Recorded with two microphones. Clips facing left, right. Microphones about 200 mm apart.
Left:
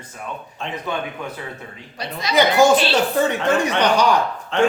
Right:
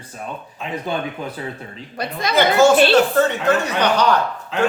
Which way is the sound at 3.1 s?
10° left (ahead or behind).